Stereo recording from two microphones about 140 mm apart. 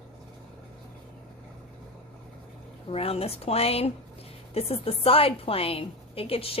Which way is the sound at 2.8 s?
45° left (ahead or behind).